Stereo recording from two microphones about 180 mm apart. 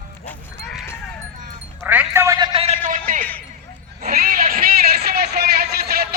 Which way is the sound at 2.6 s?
40° right (ahead or behind).